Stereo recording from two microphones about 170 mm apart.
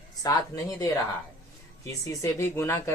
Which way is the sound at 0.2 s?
20° left (ahead or behind).